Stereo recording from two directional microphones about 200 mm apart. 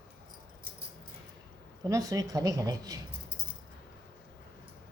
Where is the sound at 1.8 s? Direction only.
15° right (ahead or behind).